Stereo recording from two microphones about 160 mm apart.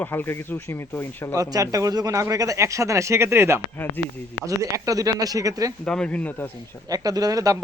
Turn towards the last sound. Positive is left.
turn(degrees=-20)  # may be behind; listen again after turning